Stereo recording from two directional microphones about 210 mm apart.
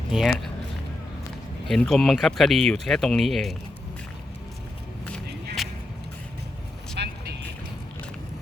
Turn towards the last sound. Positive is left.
turn(degrees=-55)  # may be behind; listen again after turning